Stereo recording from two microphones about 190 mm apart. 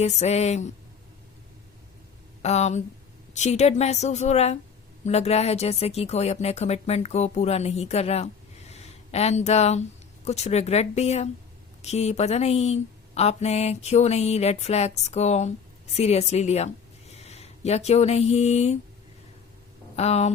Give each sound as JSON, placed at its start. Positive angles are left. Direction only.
{"t": 0.0, "sound": "speech", "side_deg": 35}
{"t": 2.4, "sound": "speech", "side_deg": 35}
{"t": 20.0, "sound": "speech", "side_deg": 35}